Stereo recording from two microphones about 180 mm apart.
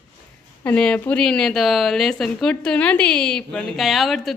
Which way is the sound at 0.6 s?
5° left (ahead or behind).